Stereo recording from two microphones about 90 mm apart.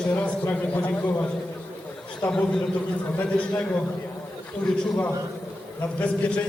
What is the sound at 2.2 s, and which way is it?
A man's voice, 10° left (ahead or behind).